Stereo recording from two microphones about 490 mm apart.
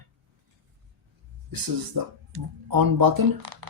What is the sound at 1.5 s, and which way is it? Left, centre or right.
Speech, right.